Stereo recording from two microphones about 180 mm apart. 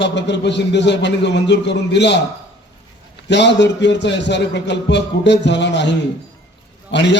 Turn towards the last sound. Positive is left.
turn(degrees=75)  # may be behind; listen again after turning